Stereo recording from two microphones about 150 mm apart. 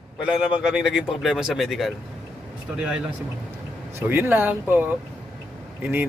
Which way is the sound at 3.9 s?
15° right (ahead or behind).